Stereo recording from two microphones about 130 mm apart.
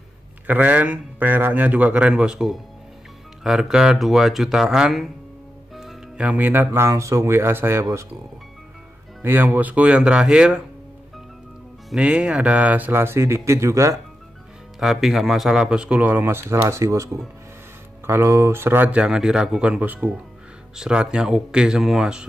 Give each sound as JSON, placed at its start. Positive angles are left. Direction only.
{"t": 0.5, "sound": "speech", "side_deg": -10}
{"t": 9.2, "sound": "speech", "side_deg": -15}
{"t": 11.9, "sound": "speech", "side_deg": -5}
{"t": 14.8, "sound": "speech", "side_deg": 0}